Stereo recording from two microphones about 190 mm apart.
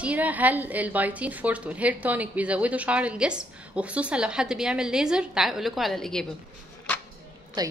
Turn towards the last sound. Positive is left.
turn(degrees=-20)  # may be behind; listen again after turning